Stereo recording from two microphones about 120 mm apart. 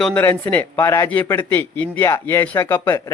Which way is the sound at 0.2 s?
15° left (ahead or behind).